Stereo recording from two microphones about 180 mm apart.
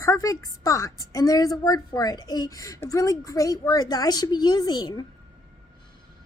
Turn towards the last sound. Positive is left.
turn(degrees=25)  # may be behind; listen again after turning